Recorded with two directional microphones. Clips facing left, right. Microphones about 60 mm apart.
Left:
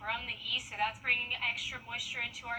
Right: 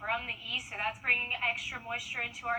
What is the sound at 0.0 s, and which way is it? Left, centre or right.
A woman's voice, right.